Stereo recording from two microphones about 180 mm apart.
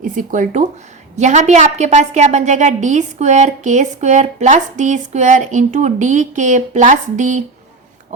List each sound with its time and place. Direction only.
0.0 s a woman's voice: 45° right (ahead or behind)